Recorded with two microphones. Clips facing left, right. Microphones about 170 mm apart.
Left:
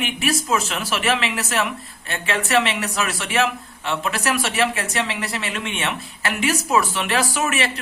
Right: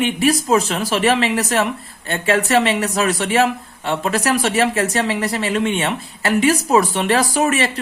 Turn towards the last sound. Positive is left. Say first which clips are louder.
# right 5 dB
turn(degrees=-40)  # may be behind; listen again after turning